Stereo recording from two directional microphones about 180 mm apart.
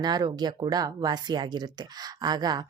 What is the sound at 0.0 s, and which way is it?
A woman's voice, 20° right (ahead or behind).